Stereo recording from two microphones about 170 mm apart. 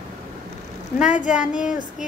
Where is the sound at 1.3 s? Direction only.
5° right (ahead or behind).